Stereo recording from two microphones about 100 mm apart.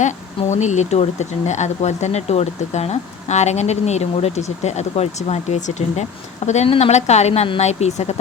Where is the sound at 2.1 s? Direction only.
90° left.